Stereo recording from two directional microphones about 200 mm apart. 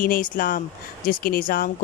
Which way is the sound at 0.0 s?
45° left (ahead or behind).